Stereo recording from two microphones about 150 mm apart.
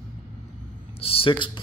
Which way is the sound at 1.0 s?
40° left (ahead or behind).